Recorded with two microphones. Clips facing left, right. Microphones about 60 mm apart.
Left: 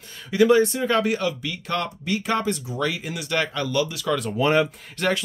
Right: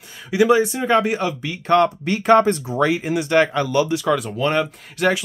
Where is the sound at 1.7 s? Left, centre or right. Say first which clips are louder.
Right 10 dB; right.